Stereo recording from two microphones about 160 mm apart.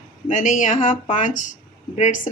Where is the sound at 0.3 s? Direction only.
50° left (ahead or behind).